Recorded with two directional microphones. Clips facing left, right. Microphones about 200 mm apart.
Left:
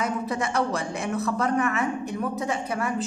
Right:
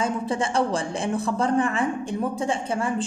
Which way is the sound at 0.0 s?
30° right (ahead or behind).